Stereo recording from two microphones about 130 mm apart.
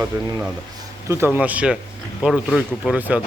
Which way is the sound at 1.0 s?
20° right (ahead or behind).